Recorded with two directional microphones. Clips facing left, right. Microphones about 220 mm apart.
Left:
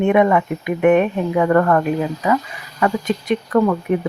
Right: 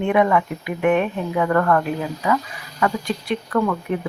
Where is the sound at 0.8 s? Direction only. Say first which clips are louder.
Left 5 dB; 45° left (ahead or behind).